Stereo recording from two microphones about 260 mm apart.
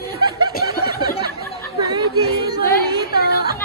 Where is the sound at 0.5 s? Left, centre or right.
Left.